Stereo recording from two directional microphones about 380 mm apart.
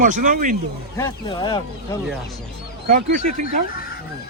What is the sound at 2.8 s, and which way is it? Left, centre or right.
Speech, right.